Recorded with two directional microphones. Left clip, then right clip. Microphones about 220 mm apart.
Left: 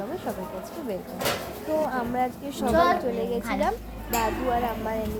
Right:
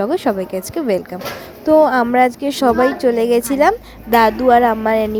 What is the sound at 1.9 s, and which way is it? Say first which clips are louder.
A woman's voice: right 14 dB; 45° right (ahead or behind).